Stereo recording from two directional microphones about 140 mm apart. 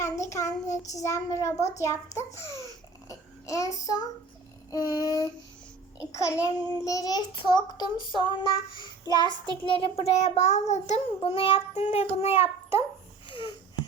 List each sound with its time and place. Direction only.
0.0 s child singing: 20° left (ahead or behind)
0.7 s child singing: 60° left (ahead or behind)
0.9 s child singing: 20° left (ahead or behind)
9.9 s a child's voice: 50° left (ahead or behind)
13.2 s wheeze: 35° left (ahead or behind)